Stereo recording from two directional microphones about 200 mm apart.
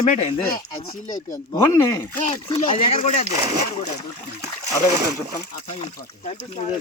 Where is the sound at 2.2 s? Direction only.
30° left (ahead or behind).